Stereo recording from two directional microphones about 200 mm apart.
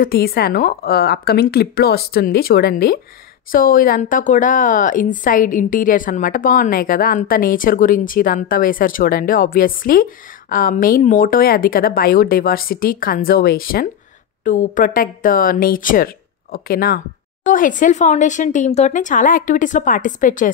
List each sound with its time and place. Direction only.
0.0 s a woman's voice: 50° left (ahead or behind)